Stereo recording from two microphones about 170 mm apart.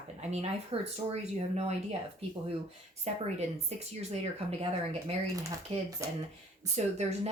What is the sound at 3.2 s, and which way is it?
Speech, 40° right (ahead or behind).